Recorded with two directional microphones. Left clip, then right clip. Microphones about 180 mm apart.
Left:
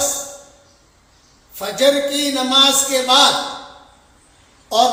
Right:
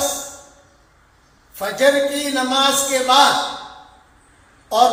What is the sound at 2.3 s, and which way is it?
Speech, 15° left (ahead or behind).